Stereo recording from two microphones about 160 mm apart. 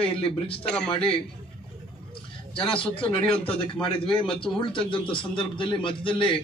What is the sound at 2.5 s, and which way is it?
A man's voice, 35° left (ahead or behind).